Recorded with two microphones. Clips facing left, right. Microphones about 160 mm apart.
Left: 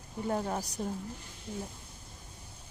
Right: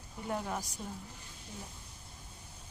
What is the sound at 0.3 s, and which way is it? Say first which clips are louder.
Speech: left 4 dB; 35° left (ahead or behind).